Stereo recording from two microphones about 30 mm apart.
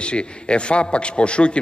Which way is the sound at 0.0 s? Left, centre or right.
Left.